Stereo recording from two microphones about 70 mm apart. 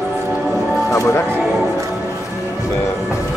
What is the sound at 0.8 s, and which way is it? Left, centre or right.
Music, left.